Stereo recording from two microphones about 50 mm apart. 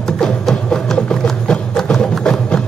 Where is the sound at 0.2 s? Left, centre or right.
Centre.